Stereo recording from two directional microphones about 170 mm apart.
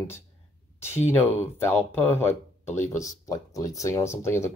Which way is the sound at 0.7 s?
15° left (ahead or behind).